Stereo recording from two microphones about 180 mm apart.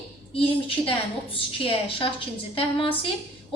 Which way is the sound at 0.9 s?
30° left (ahead or behind).